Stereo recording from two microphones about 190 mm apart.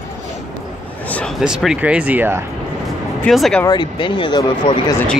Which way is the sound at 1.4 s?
5° right (ahead or behind).